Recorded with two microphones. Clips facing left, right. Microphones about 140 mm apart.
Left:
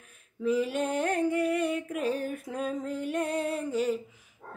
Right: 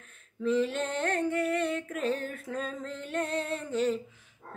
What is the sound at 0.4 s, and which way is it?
Music, 10° left (ahead or behind).